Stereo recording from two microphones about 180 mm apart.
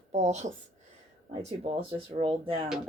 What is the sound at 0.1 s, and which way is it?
Speech, 40° right (ahead or behind).